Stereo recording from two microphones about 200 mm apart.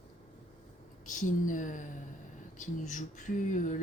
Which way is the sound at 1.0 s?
40° left (ahead or behind).